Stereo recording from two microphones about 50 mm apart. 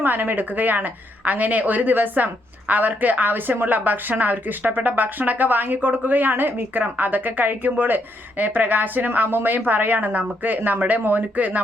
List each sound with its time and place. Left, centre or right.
0.0 s a woman's voice: right